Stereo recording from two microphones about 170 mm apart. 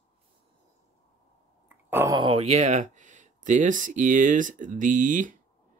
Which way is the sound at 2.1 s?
30° right (ahead or behind).